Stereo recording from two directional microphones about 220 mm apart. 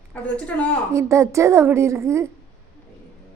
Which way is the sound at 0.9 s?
15° right (ahead or behind).